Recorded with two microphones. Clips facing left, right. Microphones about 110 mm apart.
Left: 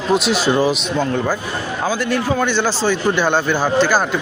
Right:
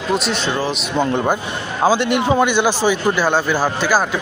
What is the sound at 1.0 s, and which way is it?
A man's voice, 20° right (ahead or behind).